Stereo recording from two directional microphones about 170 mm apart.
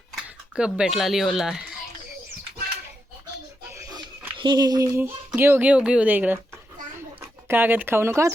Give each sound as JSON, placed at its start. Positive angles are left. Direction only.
{"t": 0.5, "sound": "speech", "side_deg": -5}
{"t": 3.8, "sound": "a sound", "side_deg": -20}
{"t": 4.4, "sound": "speech", "side_deg": -25}